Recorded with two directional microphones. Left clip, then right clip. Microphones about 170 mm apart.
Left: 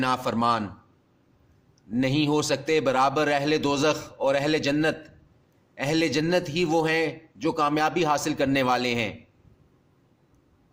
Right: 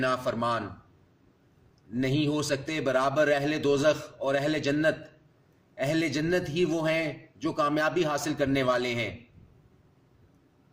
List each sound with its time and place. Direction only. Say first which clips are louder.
0.0 s a man's voice: left 3 dB; 50° left (ahead or behind)
1.9 s a man's voice: left 4 dB; 50° left (ahead or behind)